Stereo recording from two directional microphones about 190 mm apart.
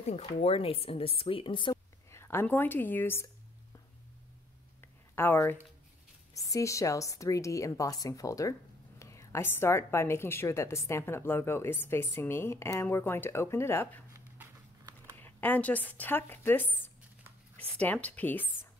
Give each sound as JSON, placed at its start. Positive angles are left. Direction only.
{"t": 0.0, "sound": "speech", "side_deg": 35}
{"t": 2.0, "sound": "speech", "side_deg": 15}
{"t": 5.1, "sound": "a woman's voice", "side_deg": 10}
{"t": 14.1, "sound": "a sound", "side_deg": -15}
{"t": 15.1, "sound": "a woman's voice", "side_deg": 10}